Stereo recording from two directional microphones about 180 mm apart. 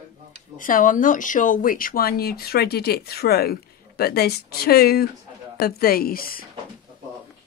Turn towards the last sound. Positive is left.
turn(degrees=55)  # may be behind; listen again after turning